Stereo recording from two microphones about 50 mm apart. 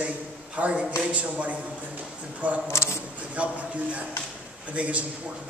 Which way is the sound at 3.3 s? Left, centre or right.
Right.